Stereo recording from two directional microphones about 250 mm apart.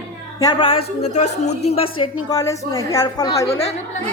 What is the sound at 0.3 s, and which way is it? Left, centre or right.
A woman's voice, centre.